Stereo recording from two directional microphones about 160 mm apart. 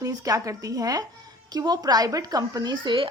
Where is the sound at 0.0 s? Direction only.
20° right (ahead or behind).